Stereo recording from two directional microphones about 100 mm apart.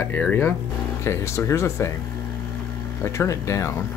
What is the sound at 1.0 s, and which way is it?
Speech, 30° left (ahead or behind).